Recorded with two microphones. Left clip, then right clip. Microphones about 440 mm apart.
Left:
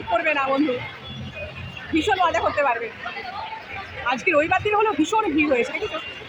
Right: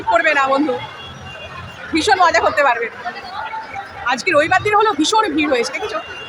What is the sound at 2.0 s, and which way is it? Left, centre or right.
Speech, left.